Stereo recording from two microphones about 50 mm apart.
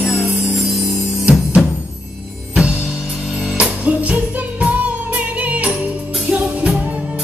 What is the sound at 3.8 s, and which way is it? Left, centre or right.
Music, right.